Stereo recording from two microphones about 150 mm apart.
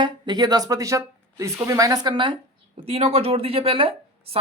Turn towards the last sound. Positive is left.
turn(degrees=-35)  # may be behind; listen again after turning